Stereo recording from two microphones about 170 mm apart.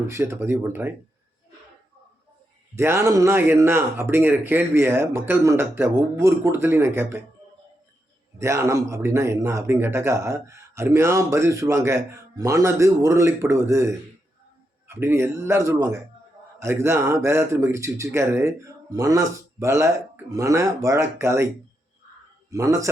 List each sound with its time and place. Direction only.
0.1 s speech: 15° right (ahead or behind)
2.7 s speech: 15° right (ahead or behind)
8.4 s speech: 15° right (ahead or behind)